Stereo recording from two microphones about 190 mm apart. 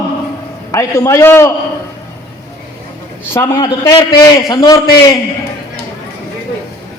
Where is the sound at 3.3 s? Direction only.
15° left (ahead or behind).